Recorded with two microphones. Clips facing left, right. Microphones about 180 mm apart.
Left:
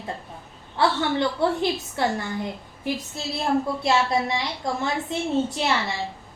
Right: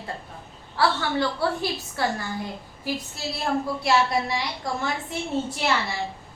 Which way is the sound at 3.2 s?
25° left (ahead or behind).